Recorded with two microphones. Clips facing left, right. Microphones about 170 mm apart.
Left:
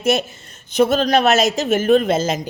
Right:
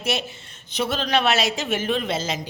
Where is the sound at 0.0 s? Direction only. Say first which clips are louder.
Left 8 dB; 45° left (ahead or behind).